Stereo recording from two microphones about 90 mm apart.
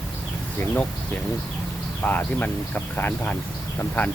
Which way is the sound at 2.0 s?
20° left (ahead or behind).